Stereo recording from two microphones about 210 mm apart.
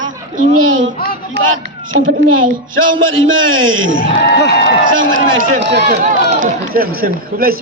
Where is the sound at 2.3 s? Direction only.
70° right (ahead or behind).